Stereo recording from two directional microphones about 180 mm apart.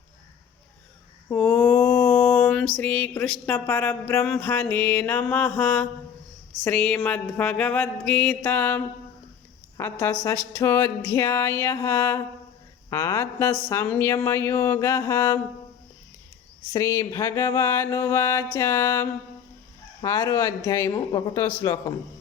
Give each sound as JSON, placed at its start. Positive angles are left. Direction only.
{"t": 1.3, "sound": "a sound", "side_deg": 5}
{"t": 2.7, "sound": "mantra", "side_deg": 10}
{"t": 16.7, "sound": "mantra", "side_deg": 15}
{"t": 21.6, "sound": "speech", "side_deg": 20}